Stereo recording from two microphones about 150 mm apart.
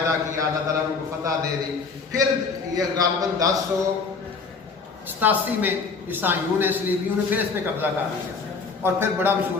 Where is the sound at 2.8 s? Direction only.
25° right (ahead or behind).